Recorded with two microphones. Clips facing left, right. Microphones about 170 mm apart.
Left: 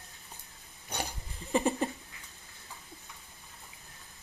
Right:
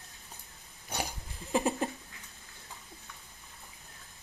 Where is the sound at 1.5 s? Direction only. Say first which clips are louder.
Left 1 dB; centre (ahead or behind).